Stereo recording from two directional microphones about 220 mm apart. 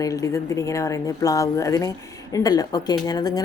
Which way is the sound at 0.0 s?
15° left (ahead or behind).